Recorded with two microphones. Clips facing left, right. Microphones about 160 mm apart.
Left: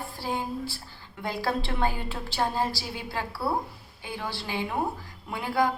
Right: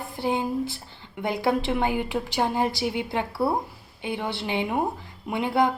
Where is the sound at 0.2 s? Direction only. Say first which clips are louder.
Right 6 dB; 20° right (ahead or behind).